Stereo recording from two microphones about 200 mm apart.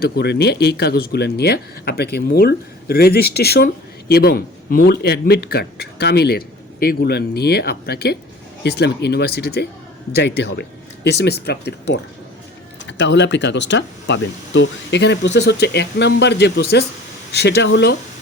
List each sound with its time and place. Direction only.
0.0 s a man's voice: 55° left (ahead or behind)
13.0 s speech: 60° left (ahead or behind)